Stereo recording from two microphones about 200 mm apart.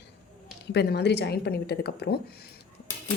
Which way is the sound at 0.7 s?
55° left (ahead or behind).